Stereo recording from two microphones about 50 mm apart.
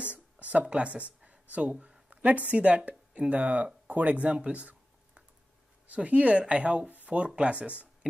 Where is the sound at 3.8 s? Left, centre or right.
Right.